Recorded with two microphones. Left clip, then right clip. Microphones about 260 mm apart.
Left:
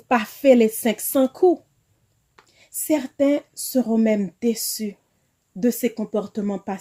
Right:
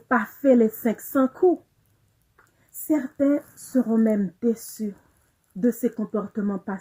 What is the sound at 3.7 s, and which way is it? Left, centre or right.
Speech, left.